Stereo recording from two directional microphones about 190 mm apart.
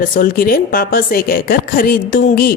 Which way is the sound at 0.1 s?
50° left (ahead or behind).